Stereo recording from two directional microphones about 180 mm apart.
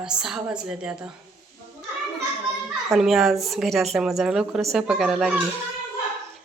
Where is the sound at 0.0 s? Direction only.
5° right (ahead or behind).